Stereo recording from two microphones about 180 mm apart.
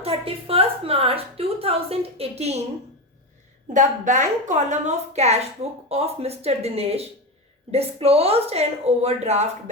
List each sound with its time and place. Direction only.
0.0 s a woman's voice: 30° right (ahead or behind)
3.7 s a woman's voice: 45° right (ahead or behind)